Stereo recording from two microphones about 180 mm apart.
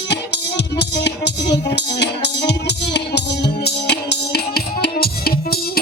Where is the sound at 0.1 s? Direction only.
70° left (ahead or behind).